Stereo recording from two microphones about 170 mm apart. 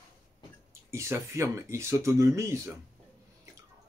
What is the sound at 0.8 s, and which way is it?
Speech, 15° right (ahead or behind).